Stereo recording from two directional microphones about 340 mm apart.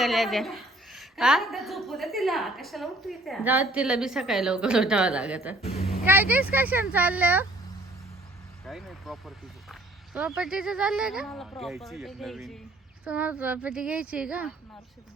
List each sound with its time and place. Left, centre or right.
0.0 s a woman's voice: centre
5.6 s speech: centre
6.1 s a woman's voice: centre
8.6 s a woman's voice: centre